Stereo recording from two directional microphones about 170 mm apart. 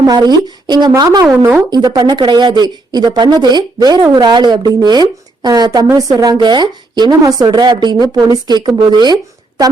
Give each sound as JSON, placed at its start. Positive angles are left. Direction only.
{"t": 0.0, "sound": "a woman's voice", "side_deg": -25}
{"t": 1.4, "sound": "speech", "side_deg": -10}
{"t": 1.7, "sound": "a woman's voice", "side_deg": -25}